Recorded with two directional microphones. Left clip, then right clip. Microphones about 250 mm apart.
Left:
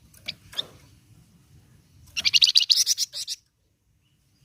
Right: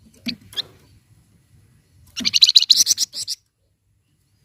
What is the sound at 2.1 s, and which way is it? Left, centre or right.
Bird, centre.